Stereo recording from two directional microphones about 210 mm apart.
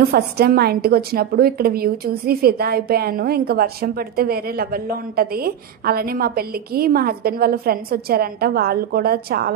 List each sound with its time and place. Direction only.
0.1 s a woman's voice: 50° right (ahead or behind)